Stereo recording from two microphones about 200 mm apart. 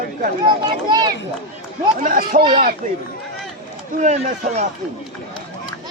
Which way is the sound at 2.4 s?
25° right (ahead or behind).